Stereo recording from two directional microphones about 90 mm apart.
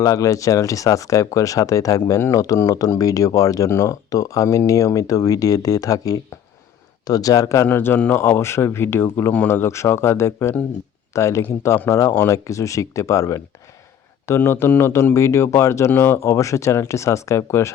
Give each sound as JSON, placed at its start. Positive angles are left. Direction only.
{"t": 0.0, "sound": "speech", "side_deg": 40}
{"t": 7.7, "sound": "speech", "side_deg": 20}
{"t": 8.2, "sound": "speech", "side_deg": 30}